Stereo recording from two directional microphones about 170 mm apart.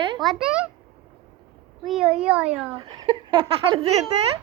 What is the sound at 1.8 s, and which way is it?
Speech, centre (ahead or behind).